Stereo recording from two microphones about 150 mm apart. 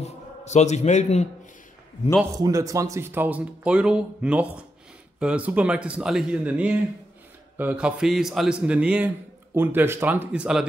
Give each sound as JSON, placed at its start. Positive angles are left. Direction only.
{"t": 0.0, "sound": "a man's voice", "side_deg": 50}
{"t": 2.3, "sound": "speech", "side_deg": -20}